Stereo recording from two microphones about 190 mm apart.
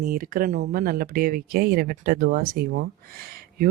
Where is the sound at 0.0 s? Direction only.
50° right (ahead or behind).